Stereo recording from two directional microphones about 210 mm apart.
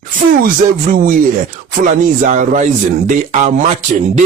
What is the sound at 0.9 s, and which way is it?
Speech, 40° right (ahead or behind).